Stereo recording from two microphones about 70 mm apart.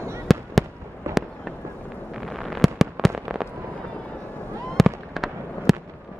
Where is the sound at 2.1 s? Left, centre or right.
Centre.